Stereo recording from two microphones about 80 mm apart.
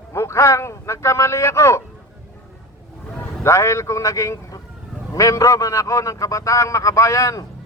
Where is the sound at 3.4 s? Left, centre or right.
Left.